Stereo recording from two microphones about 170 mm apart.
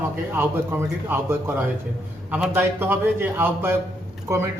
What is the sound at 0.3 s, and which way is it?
A man's voice, 15° right (ahead or behind).